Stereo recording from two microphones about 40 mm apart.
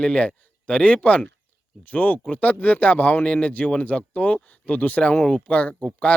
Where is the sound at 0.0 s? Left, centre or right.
Left.